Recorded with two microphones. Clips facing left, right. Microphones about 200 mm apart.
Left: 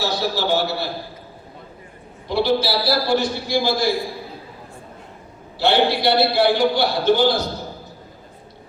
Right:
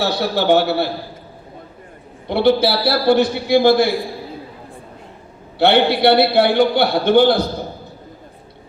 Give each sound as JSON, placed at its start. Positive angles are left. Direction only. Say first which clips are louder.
{"t": 0.0, "sound": "a man's voice", "louder": "right 4 dB", "side_deg": -60}
{"t": 2.2, "sound": "a man's voice", "louder": "right 5 dB", "side_deg": -60}
{"t": 5.5, "sound": "a man's voice", "louder": "right 4 dB", "side_deg": -60}